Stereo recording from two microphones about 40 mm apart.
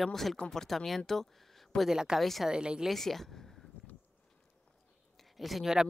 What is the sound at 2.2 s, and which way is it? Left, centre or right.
Speech, centre.